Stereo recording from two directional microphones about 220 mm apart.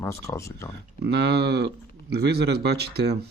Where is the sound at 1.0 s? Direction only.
50° right (ahead or behind).